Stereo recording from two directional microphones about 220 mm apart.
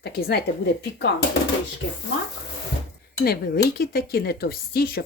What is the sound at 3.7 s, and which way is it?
A woman's voice, 45° left (ahead or behind).